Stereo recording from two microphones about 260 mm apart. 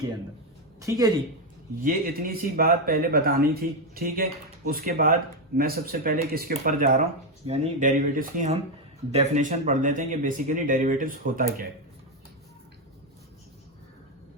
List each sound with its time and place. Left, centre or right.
0.8 s speech: centre
1.8 s speech: right